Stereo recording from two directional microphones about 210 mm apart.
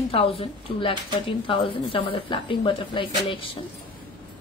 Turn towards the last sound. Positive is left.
turn(degrees=25)  # may be behind; listen again after turning